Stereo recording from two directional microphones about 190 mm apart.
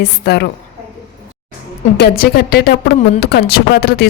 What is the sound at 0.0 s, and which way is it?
Speech, 60° left (ahead or behind).